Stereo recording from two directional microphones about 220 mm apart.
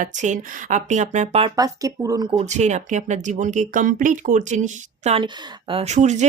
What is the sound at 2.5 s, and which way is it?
Speech, 30° right (ahead or behind).